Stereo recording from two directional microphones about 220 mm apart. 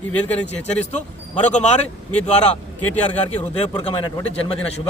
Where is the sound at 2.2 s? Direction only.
30° left (ahead or behind).